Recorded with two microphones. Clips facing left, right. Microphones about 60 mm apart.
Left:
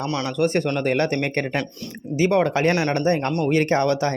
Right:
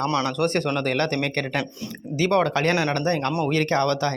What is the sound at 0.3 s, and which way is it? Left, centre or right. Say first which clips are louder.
Speech: left 2 dB; centre.